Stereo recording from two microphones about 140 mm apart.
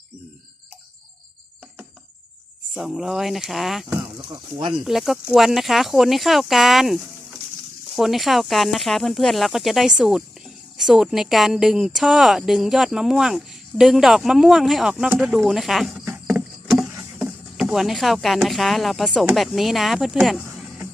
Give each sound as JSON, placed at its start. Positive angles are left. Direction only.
{"t": 2.7, "sound": "speech", "side_deg": -5}
{"t": 4.2, "sound": "speech", "side_deg": -35}
{"t": 4.8, "sound": "speech", "side_deg": 0}
{"t": 17.2, "sound": "speech", "side_deg": -5}